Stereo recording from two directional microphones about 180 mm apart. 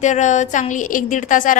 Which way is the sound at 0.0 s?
40° left (ahead or behind).